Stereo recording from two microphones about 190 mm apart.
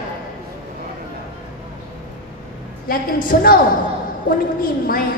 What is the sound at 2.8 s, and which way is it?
Speech, 50° left (ahead or behind).